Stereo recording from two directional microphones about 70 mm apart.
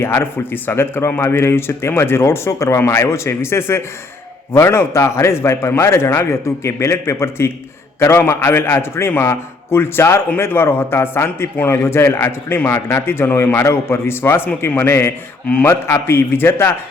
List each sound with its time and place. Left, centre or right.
0.0 s a man's voice: left